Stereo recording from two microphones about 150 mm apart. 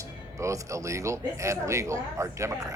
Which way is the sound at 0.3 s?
20° right (ahead or behind).